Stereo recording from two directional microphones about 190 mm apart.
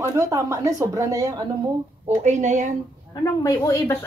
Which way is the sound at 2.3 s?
40° right (ahead or behind).